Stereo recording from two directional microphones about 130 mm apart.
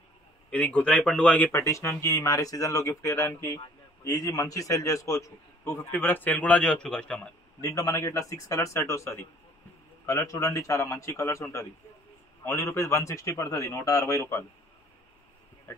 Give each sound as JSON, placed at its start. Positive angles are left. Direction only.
{"t": 0.5, "sound": "a man's voice", "side_deg": 10}
{"t": 7.6, "sound": "speech", "side_deg": 25}